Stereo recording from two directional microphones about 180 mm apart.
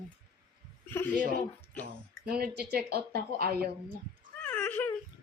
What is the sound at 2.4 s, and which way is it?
A woman's voice, 60° right (ahead or behind).